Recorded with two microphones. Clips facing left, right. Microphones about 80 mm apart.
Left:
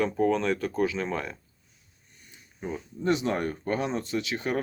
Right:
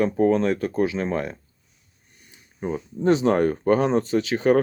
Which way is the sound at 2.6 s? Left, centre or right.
Right.